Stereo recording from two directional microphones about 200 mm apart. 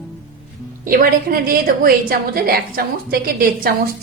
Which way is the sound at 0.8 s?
45° right (ahead or behind).